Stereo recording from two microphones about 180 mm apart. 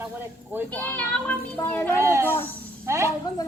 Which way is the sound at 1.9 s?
15° right (ahead or behind).